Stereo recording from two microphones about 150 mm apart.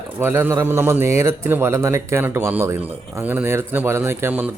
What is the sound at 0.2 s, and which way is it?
Speech, 15° right (ahead or behind).